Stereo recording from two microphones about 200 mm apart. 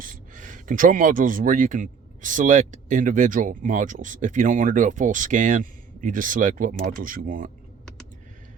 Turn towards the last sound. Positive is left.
turn(degrees=-45)  # may be behind; listen again after turning